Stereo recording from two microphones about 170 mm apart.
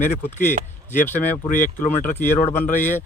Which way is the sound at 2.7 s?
50° left (ahead or behind).